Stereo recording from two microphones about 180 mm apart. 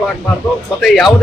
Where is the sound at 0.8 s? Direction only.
Centre (ahead or behind).